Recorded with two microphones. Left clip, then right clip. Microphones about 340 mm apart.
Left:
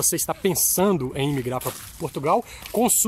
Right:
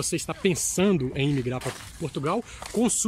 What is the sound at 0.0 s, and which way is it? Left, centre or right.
Speech, centre.